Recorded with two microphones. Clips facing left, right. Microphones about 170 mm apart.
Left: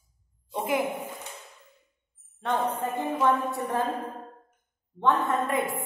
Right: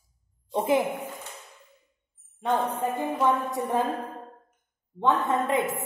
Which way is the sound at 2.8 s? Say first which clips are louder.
Even; 10° right (ahead or behind).